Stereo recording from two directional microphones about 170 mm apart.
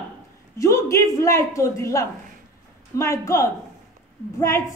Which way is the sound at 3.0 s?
15° left (ahead or behind).